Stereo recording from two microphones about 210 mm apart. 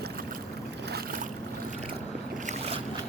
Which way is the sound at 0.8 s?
45° right (ahead or behind).